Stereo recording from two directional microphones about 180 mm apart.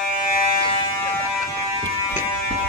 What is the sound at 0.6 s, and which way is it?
Buzzer, 30° left (ahead or behind).